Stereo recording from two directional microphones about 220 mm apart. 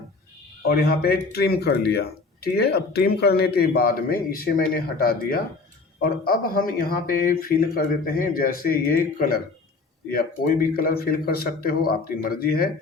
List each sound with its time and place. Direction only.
0.7 s speech: 45° left (ahead or behind)